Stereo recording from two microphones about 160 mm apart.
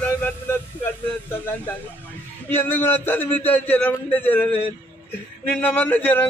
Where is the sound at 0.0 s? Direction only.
10° left (ahead or behind).